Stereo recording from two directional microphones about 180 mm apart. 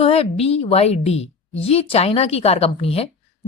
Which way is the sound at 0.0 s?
35° left (ahead or behind).